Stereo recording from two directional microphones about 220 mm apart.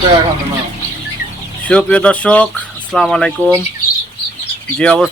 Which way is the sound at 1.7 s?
5° left (ahead or behind).